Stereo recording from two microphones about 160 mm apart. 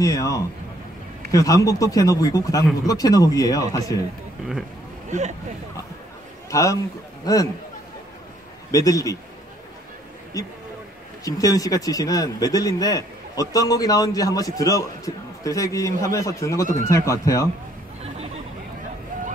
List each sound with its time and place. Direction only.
0.0 s speech: 20° left (ahead or behind)
6.5 s speech: 20° left (ahead or behind)
8.7 s speech: 20° left (ahead or behind)
10.3 s speech: 20° left (ahead or behind)
18.0 s chatter: 40° right (ahead or behind)